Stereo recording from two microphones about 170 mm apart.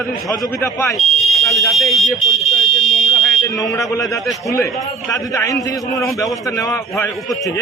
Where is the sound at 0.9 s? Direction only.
Centre (ahead or behind).